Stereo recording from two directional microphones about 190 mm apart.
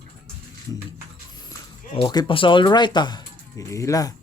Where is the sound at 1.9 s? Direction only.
25° left (ahead or behind).